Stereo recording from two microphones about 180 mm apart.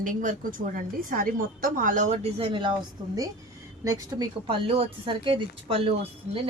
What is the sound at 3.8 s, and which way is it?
Speech, 20° right (ahead or behind).